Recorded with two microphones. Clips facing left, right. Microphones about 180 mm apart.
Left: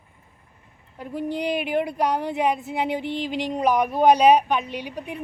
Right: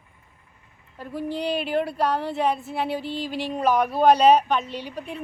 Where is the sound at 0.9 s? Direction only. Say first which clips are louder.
Left 1 dB; 15° left (ahead or behind).